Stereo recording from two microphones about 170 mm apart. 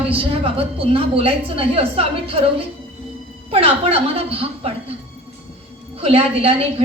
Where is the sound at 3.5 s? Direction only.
35° right (ahead or behind).